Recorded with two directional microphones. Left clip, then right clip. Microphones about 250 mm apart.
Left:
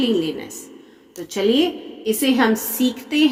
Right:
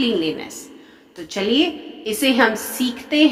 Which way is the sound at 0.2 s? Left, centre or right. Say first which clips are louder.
Right 1 dB; centre.